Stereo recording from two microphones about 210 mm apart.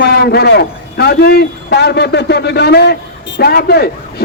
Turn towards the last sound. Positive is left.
turn(degrees=50)  # may be behind; listen again after turning